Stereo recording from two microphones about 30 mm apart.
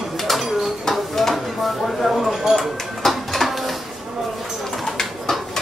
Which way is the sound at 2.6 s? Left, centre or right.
Centre.